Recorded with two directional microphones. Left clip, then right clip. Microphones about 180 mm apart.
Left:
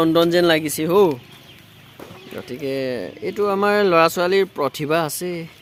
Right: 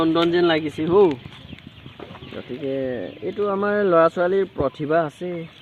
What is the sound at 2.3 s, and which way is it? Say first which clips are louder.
Speech: left 1 dB; 55° left (ahead or behind).